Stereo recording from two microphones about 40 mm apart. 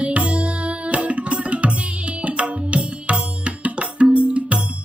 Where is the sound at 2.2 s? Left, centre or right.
Right.